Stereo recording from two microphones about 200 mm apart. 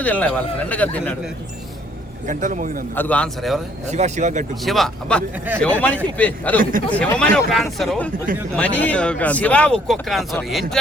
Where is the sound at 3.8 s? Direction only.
35° right (ahead or behind).